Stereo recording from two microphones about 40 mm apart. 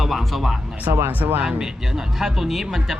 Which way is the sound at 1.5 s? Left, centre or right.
Centre.